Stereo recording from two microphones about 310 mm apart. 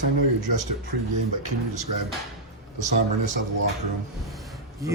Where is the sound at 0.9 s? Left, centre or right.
Right.